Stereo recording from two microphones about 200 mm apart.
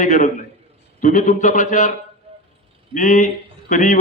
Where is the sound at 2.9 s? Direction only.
40° left (ahead or behind).